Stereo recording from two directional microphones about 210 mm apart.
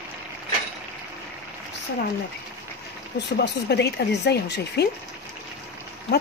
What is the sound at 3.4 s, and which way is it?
Speech, 50° left (ahead or behind).